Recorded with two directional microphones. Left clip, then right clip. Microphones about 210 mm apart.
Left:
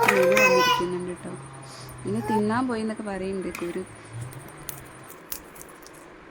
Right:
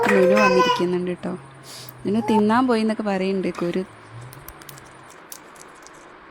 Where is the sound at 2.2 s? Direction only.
40° right (ahead or behind).